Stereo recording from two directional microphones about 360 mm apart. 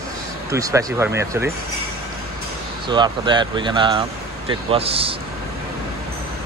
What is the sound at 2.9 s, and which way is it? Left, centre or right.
Speech, centre.